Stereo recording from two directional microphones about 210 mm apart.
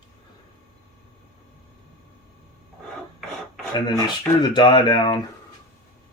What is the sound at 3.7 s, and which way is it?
Speech, 20° left (ahead or behind).